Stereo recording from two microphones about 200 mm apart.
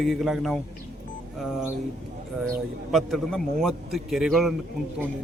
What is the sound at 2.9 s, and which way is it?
A man's voice, centre (ahead or behind).